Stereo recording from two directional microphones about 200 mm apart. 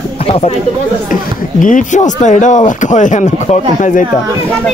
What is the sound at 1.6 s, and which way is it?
Speech, 40° left (ahead or behind).